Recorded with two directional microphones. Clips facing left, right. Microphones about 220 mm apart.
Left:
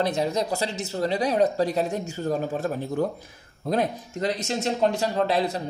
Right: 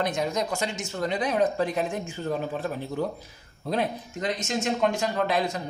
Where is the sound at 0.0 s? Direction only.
35° left (ahead or behind).